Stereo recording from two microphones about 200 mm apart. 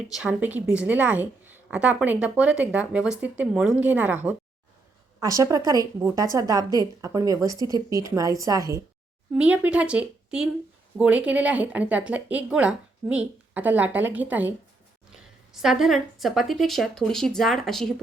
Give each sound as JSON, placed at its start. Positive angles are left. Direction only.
{"t": 0.1, "sound": "speech", "side_deg": -5}
{"t": 9.3, "sound": "speech", "side_deg": -5}
{"t": 15.6, "sound": "speech", "side_deg": 0}